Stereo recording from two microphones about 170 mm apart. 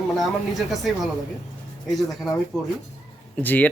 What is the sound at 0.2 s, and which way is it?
Speech, centre (ahead or behind).